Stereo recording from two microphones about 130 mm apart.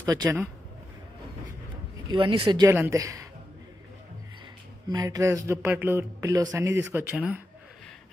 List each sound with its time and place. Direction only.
0.0 s speech: 30° right (ahead or behind)
2.0 s speech: 40° right (ahead or behind)
2.6 s speech: 20° right (ahead or behind)
4.8 s speech: 30° right (ahead or behind)
7.1 s speech: 10° right (ahead or behind)